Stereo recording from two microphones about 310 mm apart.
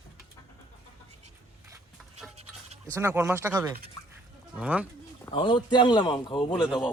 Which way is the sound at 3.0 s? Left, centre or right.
Centre.